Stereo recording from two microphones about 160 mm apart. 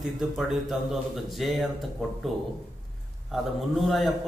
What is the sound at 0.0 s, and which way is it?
Speech, centre (ahead or behind).